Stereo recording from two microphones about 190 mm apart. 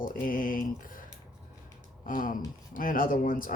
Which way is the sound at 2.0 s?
45° left (ahead or behind).